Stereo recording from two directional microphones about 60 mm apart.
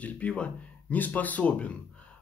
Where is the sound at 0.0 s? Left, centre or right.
Left.